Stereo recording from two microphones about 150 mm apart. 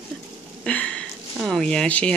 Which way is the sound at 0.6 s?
5° left (ahead or behind).